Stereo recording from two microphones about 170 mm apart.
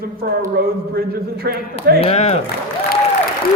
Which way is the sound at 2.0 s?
40° left (ahead or behind).